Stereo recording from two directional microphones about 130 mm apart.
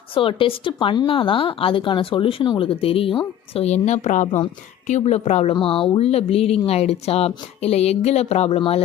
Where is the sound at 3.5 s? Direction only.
55° left (ahead or behind); by 4.4 s 75° left (ahead or behind).